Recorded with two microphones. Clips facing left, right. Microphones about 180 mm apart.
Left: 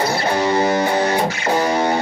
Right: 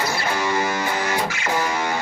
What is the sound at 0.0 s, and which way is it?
Music, 30° left (ahead or behind).